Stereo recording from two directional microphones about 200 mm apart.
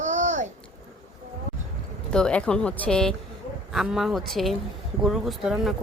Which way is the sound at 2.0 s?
5° left (ahead or behind).